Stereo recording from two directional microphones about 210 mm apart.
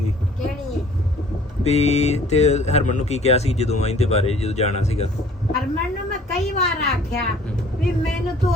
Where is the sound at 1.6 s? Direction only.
30° left (ahead or behind).